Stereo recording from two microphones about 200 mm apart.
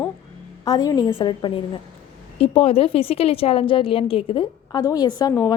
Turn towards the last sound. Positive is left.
turn(degrees=15)  # may be behind; listen again after turning